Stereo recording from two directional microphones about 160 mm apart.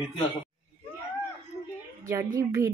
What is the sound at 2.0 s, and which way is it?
Speech, 20° right (ahead or behind).